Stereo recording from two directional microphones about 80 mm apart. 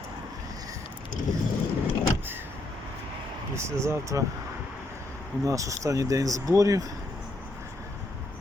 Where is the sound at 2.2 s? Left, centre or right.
Right.